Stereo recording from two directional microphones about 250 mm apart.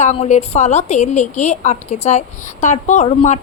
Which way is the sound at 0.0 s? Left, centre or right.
Left.